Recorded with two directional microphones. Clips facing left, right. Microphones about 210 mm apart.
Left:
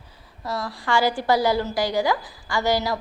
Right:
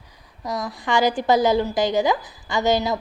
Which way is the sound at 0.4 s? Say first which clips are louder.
Right 1 dB; 20° right (ahead or behind).